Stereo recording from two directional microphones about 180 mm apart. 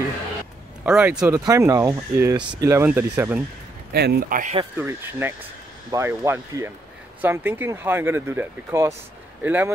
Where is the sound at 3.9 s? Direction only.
60° right (ahead or behind).